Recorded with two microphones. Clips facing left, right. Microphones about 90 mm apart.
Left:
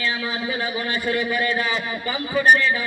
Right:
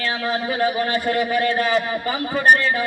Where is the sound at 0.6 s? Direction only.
45° right (ahead or behind).